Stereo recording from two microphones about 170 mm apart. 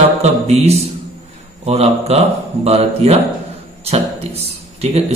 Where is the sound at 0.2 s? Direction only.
40° right (ahead or behind).